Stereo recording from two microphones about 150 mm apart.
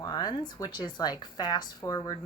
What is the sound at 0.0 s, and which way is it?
A woman's voice, 25° left (ahead or behind).